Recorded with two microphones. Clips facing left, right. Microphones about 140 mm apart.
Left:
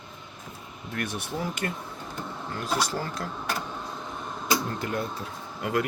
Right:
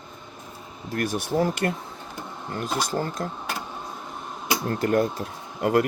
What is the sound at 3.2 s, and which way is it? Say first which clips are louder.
Speech: right 4 dB; 40° right (ahead or behind).